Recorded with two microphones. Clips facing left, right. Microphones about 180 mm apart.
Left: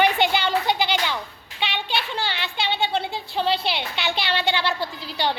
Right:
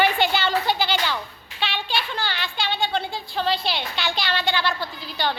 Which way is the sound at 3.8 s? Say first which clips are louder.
Left 1 dB; 20° left (ahead or behind).